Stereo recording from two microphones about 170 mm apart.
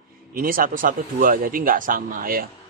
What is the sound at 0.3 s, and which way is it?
Speech, 55° right (ahead or behind).